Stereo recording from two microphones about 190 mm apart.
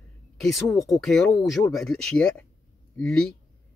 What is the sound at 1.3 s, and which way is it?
Speech, 15° left (ahead or behind).